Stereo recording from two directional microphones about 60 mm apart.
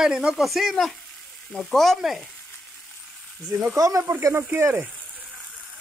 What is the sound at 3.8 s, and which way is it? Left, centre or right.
Speech, right.